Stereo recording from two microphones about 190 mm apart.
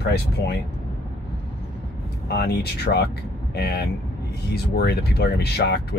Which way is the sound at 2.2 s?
60° left (ahead or behind).